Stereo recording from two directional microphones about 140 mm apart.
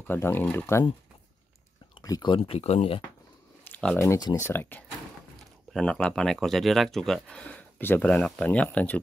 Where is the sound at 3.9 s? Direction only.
25° left (ahead or behind).